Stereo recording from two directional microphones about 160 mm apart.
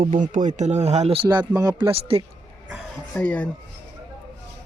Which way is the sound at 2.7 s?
5° left (ahead or behind).